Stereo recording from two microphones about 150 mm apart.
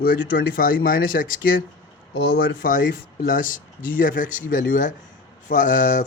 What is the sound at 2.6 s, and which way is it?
Speech, 65° left (ahead or behind).